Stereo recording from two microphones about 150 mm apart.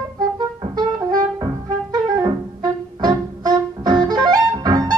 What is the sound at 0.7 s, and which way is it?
Brass instrument, 30° right (ahead or behind).